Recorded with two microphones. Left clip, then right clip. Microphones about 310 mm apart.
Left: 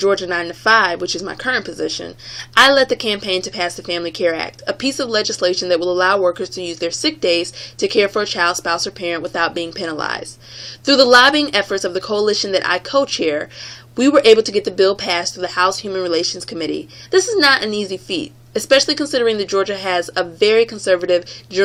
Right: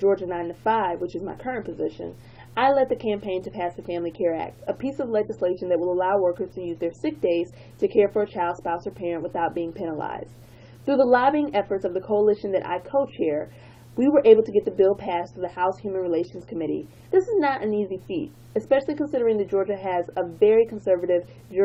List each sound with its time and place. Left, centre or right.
0.1 s speech: left
2.6 s speech: left